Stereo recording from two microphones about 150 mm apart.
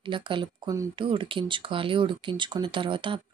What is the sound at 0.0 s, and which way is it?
Speech, 35° right (ahead or behind).